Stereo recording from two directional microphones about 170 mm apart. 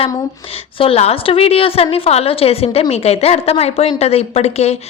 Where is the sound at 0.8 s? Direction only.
35° left (ahead or behind).